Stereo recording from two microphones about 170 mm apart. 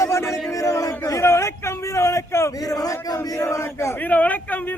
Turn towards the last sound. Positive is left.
turn(degrees=10)  # may be behind; listen again after turning